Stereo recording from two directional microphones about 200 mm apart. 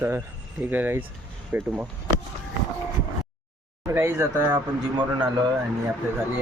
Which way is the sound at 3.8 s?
10° right (ahead or behind).